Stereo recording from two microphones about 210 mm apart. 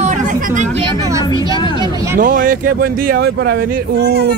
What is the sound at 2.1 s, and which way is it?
Speech, 40° right (ahead or behind).